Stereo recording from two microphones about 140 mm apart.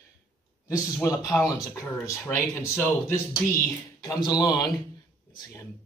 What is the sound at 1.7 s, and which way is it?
Speech, 15° left (ahead or behind).